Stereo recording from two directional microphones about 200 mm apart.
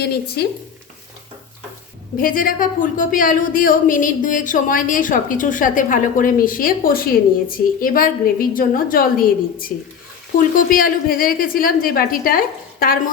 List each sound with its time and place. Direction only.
0.0 s a woman's voice: 50° left (ahead or behind)
2.1 s a woman's voice: 45° left (ahead or behind)